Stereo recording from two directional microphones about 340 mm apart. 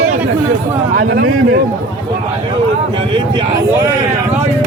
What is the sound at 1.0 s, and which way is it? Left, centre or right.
Speech, right.